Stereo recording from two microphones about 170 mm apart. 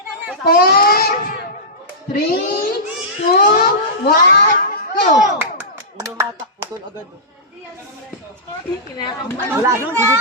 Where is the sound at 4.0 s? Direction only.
70° left (ahead or behind).